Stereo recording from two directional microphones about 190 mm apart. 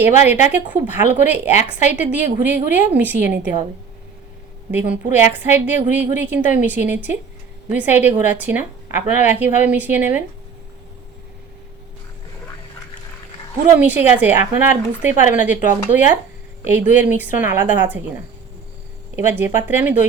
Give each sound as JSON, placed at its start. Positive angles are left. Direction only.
{"t": 0.0, "sound": "a woman's voice", "side_deg": -10}
{"t": 4.7, "sound": "a woman's voice", "side_deg": -10}
{"t": 13.7, "sound": "a woman's voice", "side_deg": -10}
{"t": 19.1, "sound": "a woman's voice", "side_deg": -10}